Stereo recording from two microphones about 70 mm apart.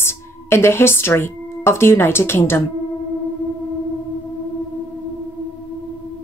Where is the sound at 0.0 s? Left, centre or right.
Left.